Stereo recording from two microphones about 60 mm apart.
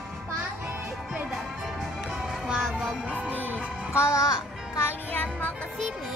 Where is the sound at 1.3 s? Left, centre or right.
Centre.